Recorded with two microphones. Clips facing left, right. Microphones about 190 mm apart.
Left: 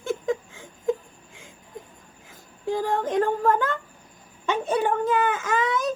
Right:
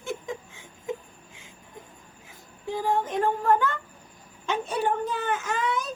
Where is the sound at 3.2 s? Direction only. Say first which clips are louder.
Left 1 dB; 50° left (ahead or behind).